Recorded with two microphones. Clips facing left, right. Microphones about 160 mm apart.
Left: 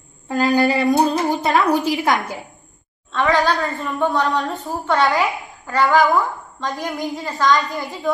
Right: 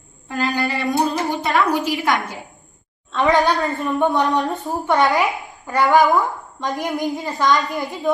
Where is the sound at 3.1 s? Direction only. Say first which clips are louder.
Right 1 dB; 20° right (ahead or behind).